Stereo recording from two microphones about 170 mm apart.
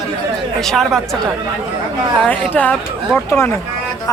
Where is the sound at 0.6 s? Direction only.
Centre (ahead or behind).